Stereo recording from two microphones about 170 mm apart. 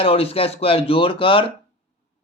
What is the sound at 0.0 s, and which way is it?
Speech, 35° left (ahead or behind).